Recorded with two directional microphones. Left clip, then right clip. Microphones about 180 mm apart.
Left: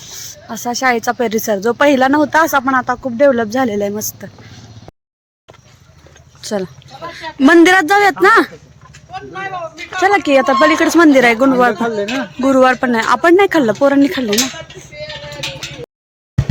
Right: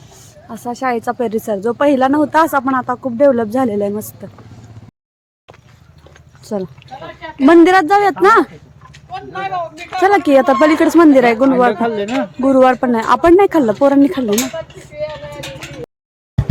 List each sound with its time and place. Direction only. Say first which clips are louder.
0.5 s speech: left 4 dB; centre (ahead or behind)
6.4 s sheep: left 2 dB; 5° right (ahead or behind)
7.3 s speech: even; centre (ahead or behind)
8.9 s a sound: right 1 dB; 40° right (ahead or behind)
10.0 s speech: right 1 dB; 20° right (ahead or behind)